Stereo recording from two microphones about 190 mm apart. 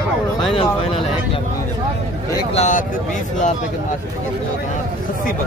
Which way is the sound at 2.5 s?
40° left (ahead or behind).